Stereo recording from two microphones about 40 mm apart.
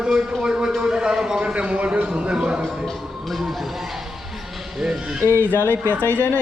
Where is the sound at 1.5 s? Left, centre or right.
Right.